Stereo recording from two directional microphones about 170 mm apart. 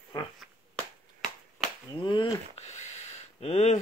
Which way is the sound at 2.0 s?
30° left (ahead or behind).